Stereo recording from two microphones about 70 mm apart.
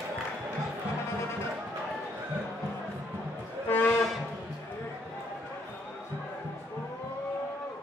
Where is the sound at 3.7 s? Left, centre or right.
Left.